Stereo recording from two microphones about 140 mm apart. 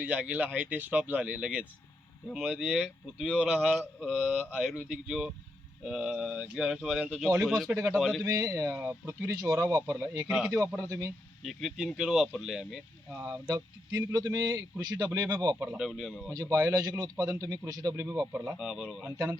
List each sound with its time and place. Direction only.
0.0 s speech: 10° right (ahead or behind)
7.7 s speech: 20° right (ahead or behind)
7.9 s speech: centre (ahead or behind)
8.2 s speech: 25° right (ahead or behind)
10.2 s speech: 5° right (ahead or behind)
10.8 s speech: 20° right (ahead or behind)
11.4 s speech: centre (ahead or behind)
13.1 s speech: 20° right (ahead or behind)
15.6 s speech: 5° right (ahead or behind)
16.3 s speech: 25° right (ahead or behind)
18.3 s speech: 10° right (ahead or behind)